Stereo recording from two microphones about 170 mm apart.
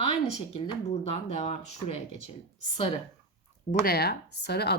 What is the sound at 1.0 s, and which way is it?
Speech, 35° left (ahead or behind).